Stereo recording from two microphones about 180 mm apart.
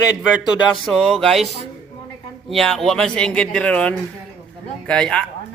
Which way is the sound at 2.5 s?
Centre (ahead or behind).